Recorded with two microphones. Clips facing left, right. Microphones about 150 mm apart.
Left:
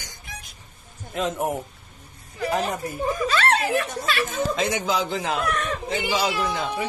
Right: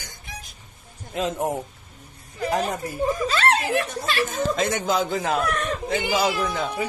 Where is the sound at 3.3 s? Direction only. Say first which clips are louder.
Even; 30° right (ahead or behind); by 6.8 s 45° right (ahead or behind).